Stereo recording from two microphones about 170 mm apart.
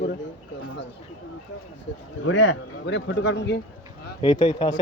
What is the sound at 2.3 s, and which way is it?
Speech, 90° left.